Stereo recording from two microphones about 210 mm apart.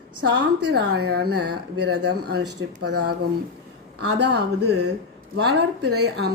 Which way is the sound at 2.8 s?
90° right.